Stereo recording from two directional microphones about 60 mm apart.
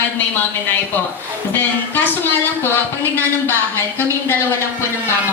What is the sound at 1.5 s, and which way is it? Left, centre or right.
Speech, left.